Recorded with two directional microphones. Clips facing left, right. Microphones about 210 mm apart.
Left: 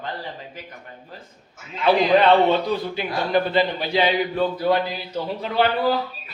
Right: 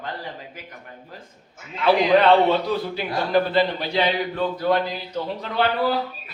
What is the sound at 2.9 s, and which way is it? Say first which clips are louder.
Speech: right 2 dB; centre (ahead or behind).